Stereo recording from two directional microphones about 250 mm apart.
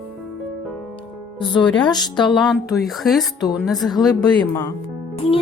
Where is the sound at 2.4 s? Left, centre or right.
Centre.